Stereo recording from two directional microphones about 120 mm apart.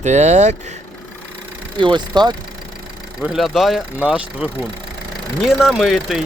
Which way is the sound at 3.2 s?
5° right (ahead or behind).